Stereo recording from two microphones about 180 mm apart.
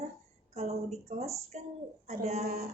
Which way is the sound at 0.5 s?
35° right (ahead or behind).